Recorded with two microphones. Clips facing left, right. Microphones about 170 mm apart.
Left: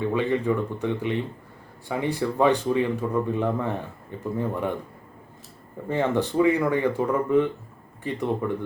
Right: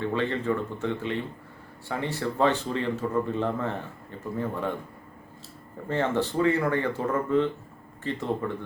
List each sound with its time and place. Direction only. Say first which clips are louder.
0.0 s speech: left 4 dB; 10° left (ahead or behind)
5.9 s speech: left 2 dB; 15° left (ahead or behind)